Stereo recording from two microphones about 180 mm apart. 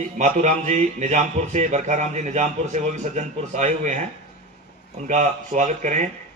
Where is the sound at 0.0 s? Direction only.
40° right (ahead or behind).